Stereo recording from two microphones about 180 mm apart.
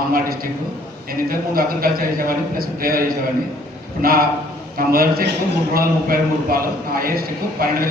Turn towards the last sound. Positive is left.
turn(degrees=-55)  # may be behind; listen again after turning